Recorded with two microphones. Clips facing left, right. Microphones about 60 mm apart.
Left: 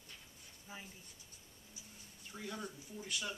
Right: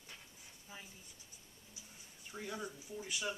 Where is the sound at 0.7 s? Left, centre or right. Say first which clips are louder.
Left 2 dB; left.